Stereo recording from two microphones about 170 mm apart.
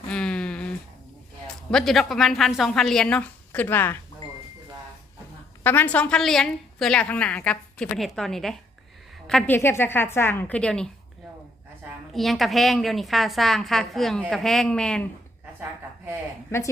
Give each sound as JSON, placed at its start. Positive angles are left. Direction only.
{"t": 0.1, "sound": "a sound", "side_deg": 5}
{"t": 1.7, "sound": "a woman's voice", "side_deg": 0}
{"t": 5.6, "sound": "a woman's voice", "side_deg": 10}
{"t": 12.1, "sound": "a woman's voice", "side_deg": 0}